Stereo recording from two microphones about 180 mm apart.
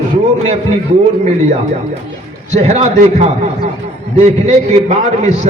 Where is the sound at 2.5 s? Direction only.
40° right (ahead or behind).